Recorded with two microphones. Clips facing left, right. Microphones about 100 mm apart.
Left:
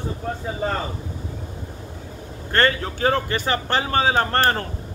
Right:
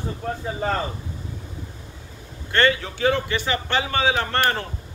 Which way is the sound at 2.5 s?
40° left (ahead or behind).